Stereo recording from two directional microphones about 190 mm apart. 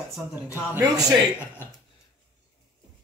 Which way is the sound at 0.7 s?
20° right (ahead or behind).